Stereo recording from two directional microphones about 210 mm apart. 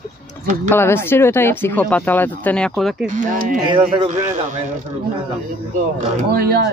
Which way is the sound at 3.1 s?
35° right (ahead or behind).